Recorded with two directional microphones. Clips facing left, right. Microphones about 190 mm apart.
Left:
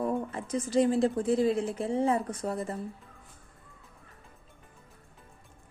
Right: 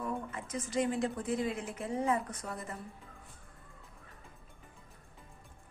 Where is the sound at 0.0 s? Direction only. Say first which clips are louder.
Left 7 dB; 35° left (ahead or behind).